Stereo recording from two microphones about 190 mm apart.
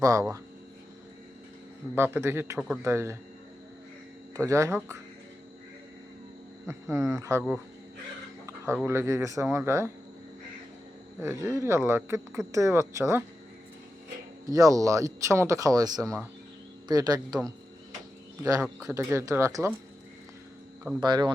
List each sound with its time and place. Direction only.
0.0 s speech: 20° right (ahead or behind)
2.0 s speech: 10° right (ahead or behind)
4.4 s speech: 15° right (ahead or behind)
6.9 s speech: 15° right (ahead or behind)
8.4 s a sound: 15° right (ahead or behind)
8.9 s speech: 15° right (ahead or behind)
11.2 s speech: 15° right (ahead or behind)
14.4 s speech: 20° right (ahead or behind)
18.6 s speech: 15° right (ahead or behind)
21.0 s speech: 20° right (ahead or behind)